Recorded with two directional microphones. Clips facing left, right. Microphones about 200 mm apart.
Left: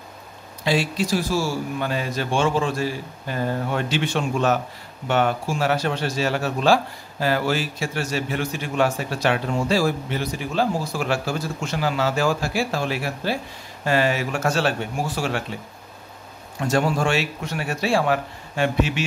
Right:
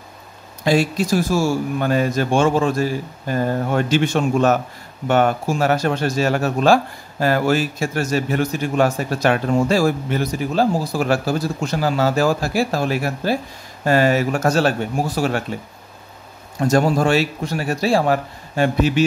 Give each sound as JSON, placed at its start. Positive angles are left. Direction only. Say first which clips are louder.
{"t": 0.7, "sound": "speech", "louder": "right 5 dB", "side_deg": -45}
{"t": 16.5, "sound": "speech", "louder": "right 5 dB", "side_deg": -40}